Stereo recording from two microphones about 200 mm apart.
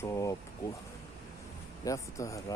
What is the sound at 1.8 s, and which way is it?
Speech, 15° left (ahead or behind).